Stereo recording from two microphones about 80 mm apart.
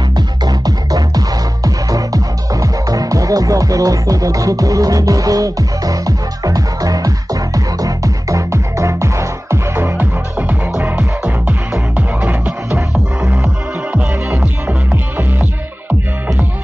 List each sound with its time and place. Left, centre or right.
0.5 s music: right
10.8 s music: centre
14.3 s music: right